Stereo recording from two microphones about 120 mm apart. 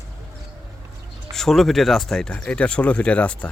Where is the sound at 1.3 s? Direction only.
5° left (ahead or behind).